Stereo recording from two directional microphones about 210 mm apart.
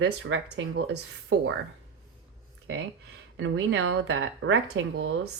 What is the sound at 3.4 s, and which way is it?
Speech, 70° right (ahead or behind).